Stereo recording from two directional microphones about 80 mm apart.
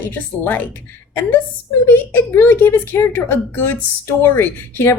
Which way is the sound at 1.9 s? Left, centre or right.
Left.